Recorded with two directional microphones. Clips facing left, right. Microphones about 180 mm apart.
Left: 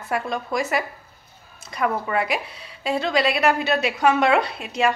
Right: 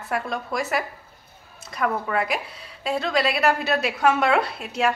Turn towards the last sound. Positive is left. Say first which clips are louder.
# left 2 dB
turn(degrees=0)  # may be behind; listen again after turning